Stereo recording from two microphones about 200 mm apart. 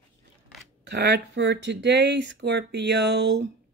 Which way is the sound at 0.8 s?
60° right (ahead or behind).